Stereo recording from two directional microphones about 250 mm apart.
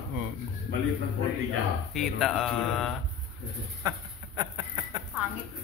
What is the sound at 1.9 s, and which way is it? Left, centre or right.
Speech, centre.